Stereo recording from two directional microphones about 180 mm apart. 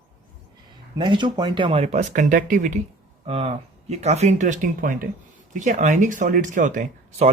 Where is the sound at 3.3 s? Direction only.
30° right (ahead or behind).